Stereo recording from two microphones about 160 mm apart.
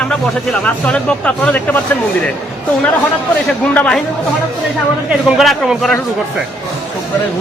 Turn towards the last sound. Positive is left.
turn(degrees=0)  # may be behind; listen again after turning